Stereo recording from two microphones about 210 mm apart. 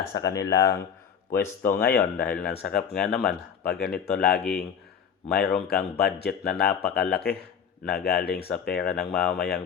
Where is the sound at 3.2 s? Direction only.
50° left (ahead or behind).